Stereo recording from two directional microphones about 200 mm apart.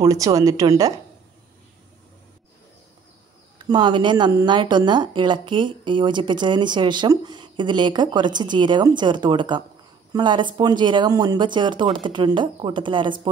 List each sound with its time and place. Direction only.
0.0 s speech: 15° right (ahead or behind)
3.5 s speech: 20° right (ahead or behind)